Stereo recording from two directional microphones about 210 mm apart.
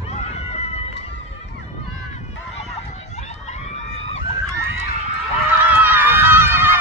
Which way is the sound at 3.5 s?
30° left (ahead or behind).